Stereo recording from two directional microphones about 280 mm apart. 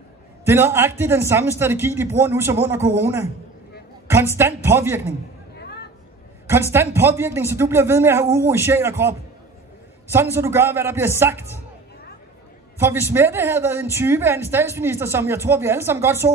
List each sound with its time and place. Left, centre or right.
0.5 s a woman's voice: centre
5.6 s a sound: left
6.4 s a woman's voice: centre
10.1 s a woman's voice: centre
12.7 s a woman's voice: centre